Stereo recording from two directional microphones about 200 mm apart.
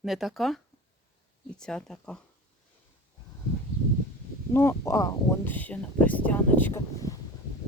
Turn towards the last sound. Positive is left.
turn(degrees=15)  # may be behind; listen again after turning